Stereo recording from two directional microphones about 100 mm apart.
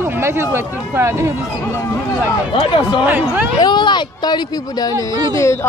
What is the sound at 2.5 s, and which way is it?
Speech, 55° left (ahead or behind).